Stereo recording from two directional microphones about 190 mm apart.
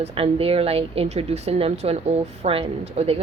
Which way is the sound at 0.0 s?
30° right (ahead or behind).